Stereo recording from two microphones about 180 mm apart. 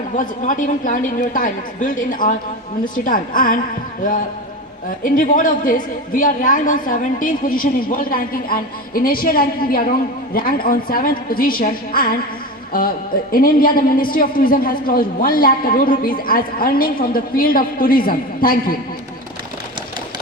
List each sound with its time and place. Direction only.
0.2 s a woman's voice: 45° left (ahead or behind)
4.9 s a woman's voice: 50° left (ahead or behind)
13.3 s a woman's voice: 50° left (ahead or behind)